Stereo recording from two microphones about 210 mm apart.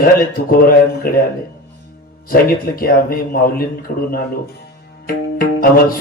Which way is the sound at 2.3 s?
45° left (ahead or behind).